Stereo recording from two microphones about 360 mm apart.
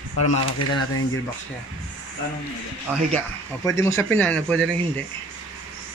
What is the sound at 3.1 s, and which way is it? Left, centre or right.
Speech, centre.